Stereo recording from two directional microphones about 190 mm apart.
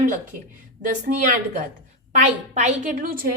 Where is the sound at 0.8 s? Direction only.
45° right (ahead or behind).